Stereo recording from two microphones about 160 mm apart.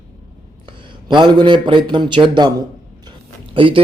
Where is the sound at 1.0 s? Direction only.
30° right (ahead or behind).